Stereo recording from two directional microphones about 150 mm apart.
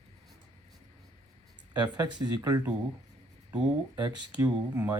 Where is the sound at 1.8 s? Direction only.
30° right (ahead or behind).